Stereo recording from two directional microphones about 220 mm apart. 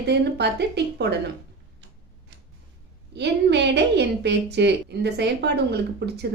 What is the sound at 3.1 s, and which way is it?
A woman's voice, 50° right (ahead or behind).